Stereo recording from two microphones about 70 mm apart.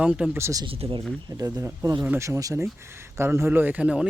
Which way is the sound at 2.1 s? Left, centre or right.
Right.